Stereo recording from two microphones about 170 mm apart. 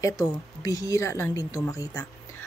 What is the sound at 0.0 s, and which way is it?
Speech, 20° left (ahead or behind).